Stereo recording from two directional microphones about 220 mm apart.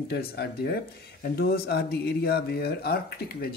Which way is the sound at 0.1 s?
45° left (ahead or behind).